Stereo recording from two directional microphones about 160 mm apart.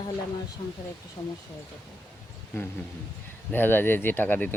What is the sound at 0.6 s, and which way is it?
Speech, 25° left (ahead or behind).